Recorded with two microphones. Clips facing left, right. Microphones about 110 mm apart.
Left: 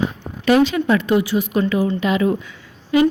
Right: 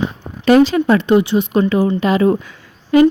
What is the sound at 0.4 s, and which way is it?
A woman's voice, 40° right (ahead or behind).